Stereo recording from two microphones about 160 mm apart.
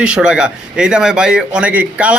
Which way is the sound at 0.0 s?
5° right (ahead or behind).